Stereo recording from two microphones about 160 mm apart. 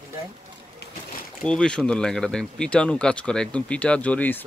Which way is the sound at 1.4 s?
5° left (ahead or behind).